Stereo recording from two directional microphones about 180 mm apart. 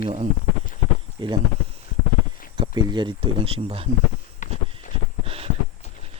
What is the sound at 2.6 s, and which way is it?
Speech, 25° right (ahead or behind).